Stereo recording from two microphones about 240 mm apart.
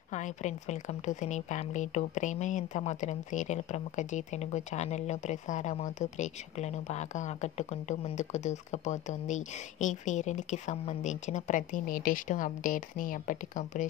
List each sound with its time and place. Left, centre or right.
0.1 s a woman's voice: left